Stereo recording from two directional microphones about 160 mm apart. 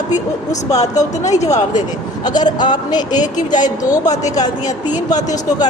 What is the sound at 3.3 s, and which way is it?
Speech, 50° left (ahead or behind).